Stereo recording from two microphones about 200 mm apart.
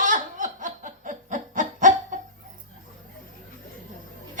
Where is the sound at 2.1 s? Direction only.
40° right (ahead or behind).